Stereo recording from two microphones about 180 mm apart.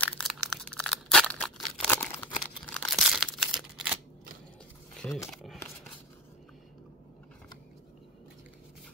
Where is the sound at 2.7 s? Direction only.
Centre (ahead or behind).